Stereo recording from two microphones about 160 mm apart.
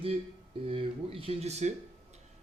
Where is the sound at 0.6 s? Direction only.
35° right (ahead or behind).